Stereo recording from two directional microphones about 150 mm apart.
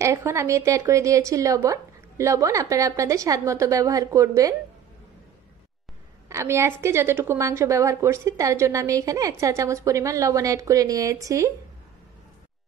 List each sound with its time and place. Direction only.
0.0 s a woman's voice: 20° right (ahead or behind)
6.2 s a woman's voice: 20° right (ahead or behind)